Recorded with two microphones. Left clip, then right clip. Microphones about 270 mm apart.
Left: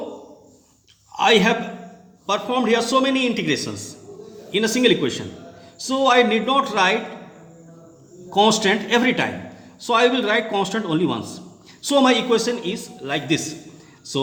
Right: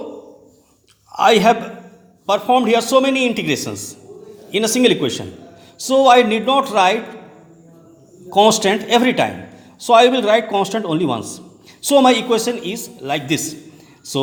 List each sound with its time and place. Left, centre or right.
1.1 s a man's voice: right
8.4 s a man's voice: right